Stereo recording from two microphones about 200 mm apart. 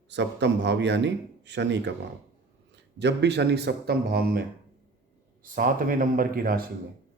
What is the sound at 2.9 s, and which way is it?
A man's voice, 60° right (ahead or behind).